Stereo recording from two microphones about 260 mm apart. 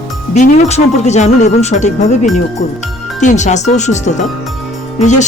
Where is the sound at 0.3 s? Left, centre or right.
Left.